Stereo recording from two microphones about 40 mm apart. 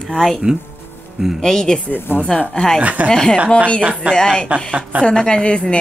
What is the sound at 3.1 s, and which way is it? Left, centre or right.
A woman's voice, centre.